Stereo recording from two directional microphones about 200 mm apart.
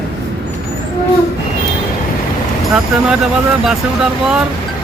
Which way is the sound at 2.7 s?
5° right (ahead or behind).